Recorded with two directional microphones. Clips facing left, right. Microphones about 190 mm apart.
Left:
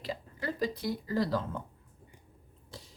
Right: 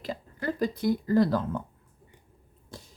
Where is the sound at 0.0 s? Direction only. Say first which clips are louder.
Right 4 dB; 50° right (ahead or behind).